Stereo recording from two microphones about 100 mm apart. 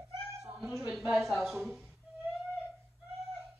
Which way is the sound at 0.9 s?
5° right (ahead or behind).